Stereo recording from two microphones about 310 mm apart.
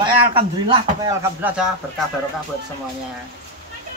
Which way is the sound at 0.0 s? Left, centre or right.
Centre.